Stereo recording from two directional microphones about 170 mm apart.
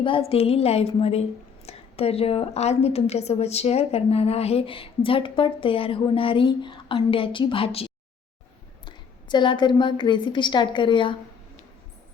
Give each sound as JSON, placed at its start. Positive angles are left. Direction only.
{"t": 0.0, "sound": "a woman's voice", "side_deg": 35}